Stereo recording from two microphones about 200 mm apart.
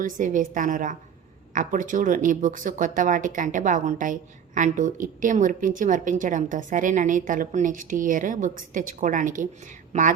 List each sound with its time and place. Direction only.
0.0 s speech: 40° right (ahead or behind)